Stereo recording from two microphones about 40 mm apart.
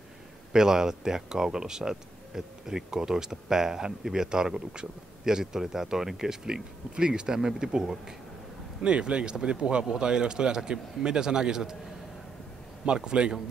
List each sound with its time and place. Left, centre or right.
0.5 s speech: centre
8.8 s speech: right
12.8 s speech: right